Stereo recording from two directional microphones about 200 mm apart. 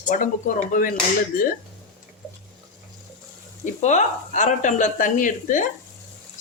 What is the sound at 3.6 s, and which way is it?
Speech, 35° left (ahead or behind).